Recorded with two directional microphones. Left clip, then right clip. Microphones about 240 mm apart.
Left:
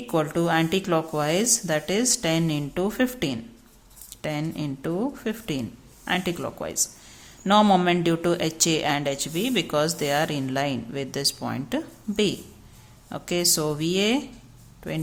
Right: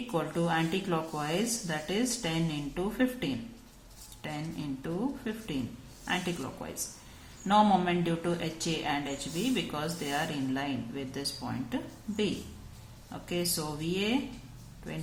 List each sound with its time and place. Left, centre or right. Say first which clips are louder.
0.1 s speech: left 8 dB; left